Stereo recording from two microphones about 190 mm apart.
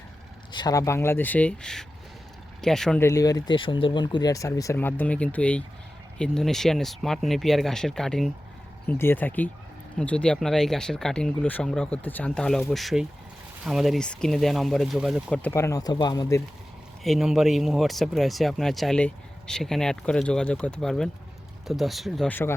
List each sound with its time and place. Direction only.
0.5 s speech: 20° left (ahead or behind); by 3.0 s centre (ahead or behind)
3.0 s speech: 15° left (ahead or behind); by 15.4 s 5° right (ahead or behind)
15.4 s speech: 10° left (ahead or behind)
17.0 s speech: centre (ahead or behind)